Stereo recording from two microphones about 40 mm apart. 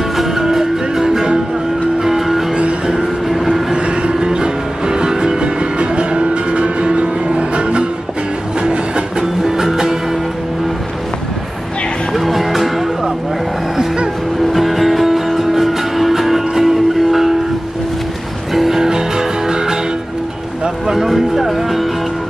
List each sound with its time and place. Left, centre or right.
0.2 s music: centre
2.5 s music: right
3.3 s train: centre
3.7 s music: right
8.5 s train: right
9.4 s music: centre
12.1 s music: centre
14.5 s music: centre
18.5 s music: centre
18.8 s music: centre